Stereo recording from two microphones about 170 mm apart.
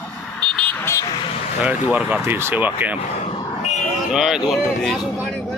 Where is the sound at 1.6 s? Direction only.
10° right (ahead or behind).